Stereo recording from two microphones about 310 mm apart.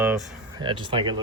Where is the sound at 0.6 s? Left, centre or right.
Centre.